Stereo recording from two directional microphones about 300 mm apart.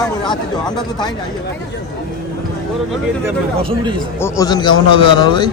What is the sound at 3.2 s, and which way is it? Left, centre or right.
Speech, centre.